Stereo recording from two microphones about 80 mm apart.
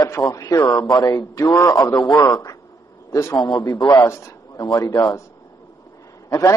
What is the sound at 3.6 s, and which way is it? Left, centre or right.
A man's voice, left.